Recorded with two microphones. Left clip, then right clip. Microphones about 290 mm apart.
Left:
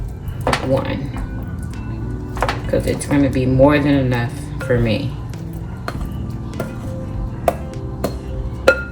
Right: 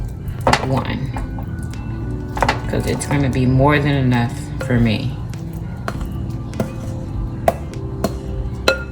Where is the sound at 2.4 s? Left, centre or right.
Centre.